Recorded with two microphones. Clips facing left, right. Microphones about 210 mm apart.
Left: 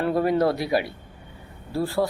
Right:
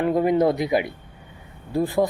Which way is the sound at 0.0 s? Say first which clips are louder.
Right 2 dB; 15° right (ahead or behind).